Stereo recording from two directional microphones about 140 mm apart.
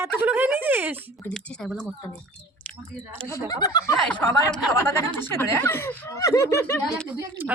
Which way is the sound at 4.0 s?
10° left (ahead or behind).